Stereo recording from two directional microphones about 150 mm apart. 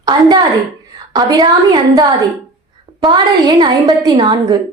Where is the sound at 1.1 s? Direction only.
25° right (ahead or behind).